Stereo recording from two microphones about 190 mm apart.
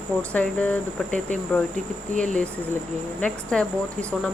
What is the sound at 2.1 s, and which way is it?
Cricket, 40° right (ahead or behind).